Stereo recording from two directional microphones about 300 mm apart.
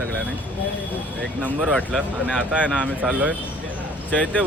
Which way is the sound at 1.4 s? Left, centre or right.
Centre.